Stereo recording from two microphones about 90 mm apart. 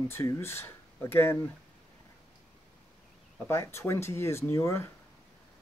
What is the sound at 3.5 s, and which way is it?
Speech, 30° left (ahead or behind).